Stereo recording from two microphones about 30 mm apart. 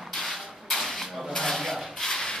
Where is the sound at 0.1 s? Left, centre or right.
Centre.